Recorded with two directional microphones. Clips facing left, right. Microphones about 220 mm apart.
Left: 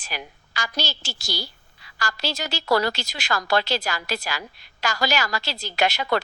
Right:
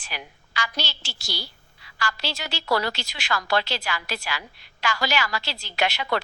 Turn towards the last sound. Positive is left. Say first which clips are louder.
# left 3 dB
turn(degrees=40)  # may be behind; listen again after turning